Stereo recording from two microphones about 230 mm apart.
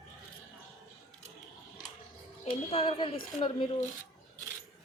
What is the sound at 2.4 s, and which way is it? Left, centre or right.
Speech, left.